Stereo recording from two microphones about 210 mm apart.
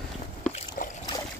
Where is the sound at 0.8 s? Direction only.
40° left (ahead or behind).